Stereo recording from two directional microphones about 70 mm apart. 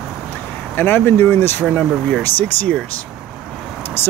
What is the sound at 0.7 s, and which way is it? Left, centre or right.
Speech, left.